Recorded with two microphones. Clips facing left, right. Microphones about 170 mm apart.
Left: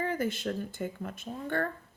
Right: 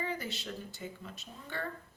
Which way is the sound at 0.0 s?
50° left (ahead or behind).